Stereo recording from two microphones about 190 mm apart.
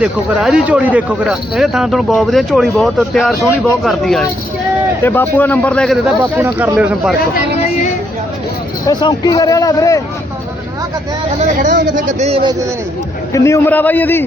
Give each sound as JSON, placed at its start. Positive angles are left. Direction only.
{"t": 0.0, "sound": "a man's voice", "side_deg": -5}
{"t": 6.3, "sound": "speech", "side_deg": -10}
{"t": 8.9, "sound": "a man's voice", "side_deg": 20}
{"t": 11.3, "sound": "speech", "side_deg": -40}
{"t": 13.3, "sound": "a man's voice", "side_deg": 15}